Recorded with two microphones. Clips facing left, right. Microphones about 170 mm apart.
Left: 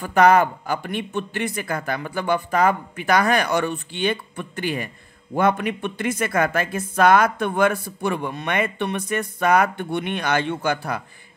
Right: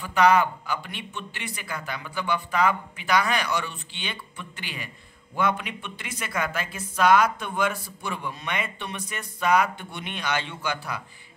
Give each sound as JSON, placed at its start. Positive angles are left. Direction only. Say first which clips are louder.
{"t": 0.0, "sound": "speech", "louder": "left 4 dB", "side_deg": 50}